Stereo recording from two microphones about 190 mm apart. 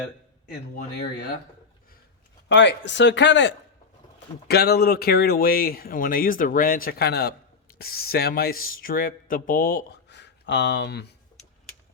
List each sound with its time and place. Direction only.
2.5 s speech: 65° left (ahead or behind)
4.4 s speech: 55° left (ahead or behind)